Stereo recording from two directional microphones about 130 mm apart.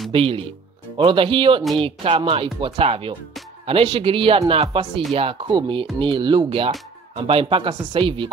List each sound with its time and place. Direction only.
0.1 s speech: 45° right (ahead or behind)